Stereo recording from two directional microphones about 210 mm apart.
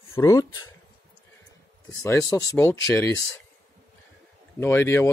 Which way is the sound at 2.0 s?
15° left (ahead or behind).